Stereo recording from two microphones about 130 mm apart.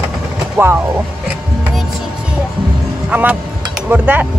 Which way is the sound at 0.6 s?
15° right (ahead or behind).